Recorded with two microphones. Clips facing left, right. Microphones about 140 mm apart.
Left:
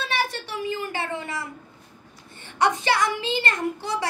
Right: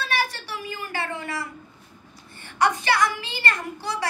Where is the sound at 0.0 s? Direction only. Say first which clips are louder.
Even; 20° left (ahead or behind).